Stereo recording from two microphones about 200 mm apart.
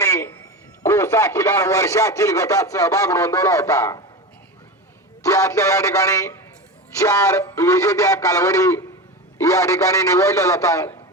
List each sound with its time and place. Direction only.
0.0 s a sound: 15° left (ahead or behind)
0.9 s speech: 15° left (ahead or behind)
5.2 s speech: 15° left (ahead or behind)